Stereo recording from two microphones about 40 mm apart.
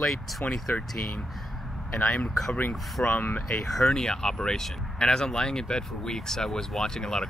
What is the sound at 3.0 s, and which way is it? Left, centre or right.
Speech, left.